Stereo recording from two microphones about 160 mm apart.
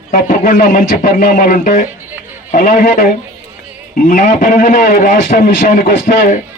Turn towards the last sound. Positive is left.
turn(degrees=55)  # may be behind; listen again after turning